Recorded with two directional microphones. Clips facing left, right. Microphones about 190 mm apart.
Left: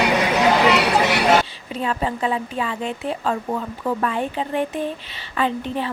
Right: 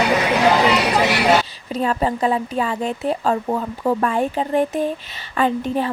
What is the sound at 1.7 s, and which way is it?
Speech, 40° right (ahead or behind).